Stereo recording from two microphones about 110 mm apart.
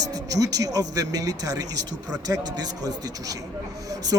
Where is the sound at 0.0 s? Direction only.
35° right (ahead or behind).